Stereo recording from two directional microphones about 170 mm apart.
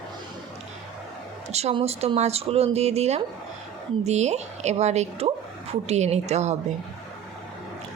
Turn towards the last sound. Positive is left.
turn(degrees=-40)  # may be behind; listen again after turning